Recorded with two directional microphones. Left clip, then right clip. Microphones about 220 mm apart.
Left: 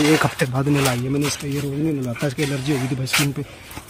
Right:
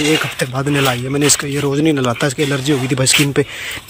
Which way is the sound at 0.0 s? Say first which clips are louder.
Right 2 dB; 10° left (ahead or behind).